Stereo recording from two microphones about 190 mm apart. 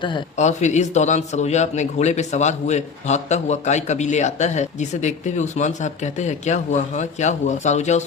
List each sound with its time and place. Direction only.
0.3 s a man's voice: 40° left (ahead or behind)